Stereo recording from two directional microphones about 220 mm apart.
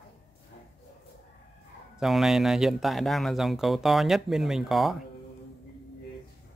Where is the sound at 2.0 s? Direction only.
Centre (ahead or behind).